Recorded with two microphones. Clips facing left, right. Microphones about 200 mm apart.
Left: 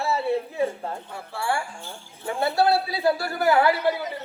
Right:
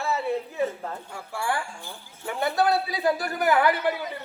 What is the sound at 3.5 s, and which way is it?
Speech, 30° left (ahead or behind).